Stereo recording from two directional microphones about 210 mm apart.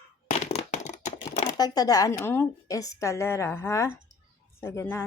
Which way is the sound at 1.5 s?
20° left (ahead or behind).